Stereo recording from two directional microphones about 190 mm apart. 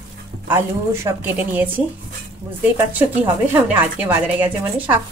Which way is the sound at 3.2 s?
10° right (ahead or behind).